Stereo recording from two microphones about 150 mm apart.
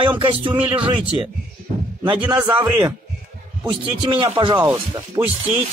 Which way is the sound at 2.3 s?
25° right (ahead or behind).